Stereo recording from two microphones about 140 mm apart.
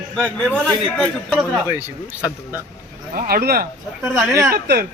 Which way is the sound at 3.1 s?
85° right.